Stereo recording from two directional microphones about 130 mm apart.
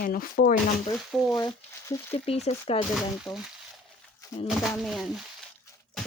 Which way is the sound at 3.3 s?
25° left (ahead or behind).